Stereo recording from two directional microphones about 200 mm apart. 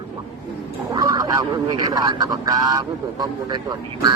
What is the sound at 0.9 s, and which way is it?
Speech, 20° right (ahead or behind).